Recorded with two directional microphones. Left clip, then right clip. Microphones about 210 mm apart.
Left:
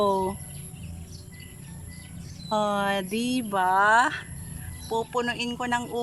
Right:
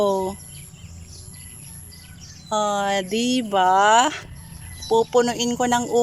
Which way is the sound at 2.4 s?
5° left (ahead or behind).